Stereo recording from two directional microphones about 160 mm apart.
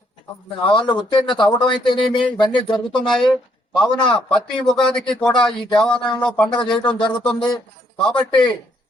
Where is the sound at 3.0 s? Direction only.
5° left (ahead or behind).